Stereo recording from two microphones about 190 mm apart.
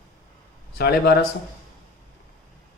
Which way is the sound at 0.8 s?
55° left (ahead or behind).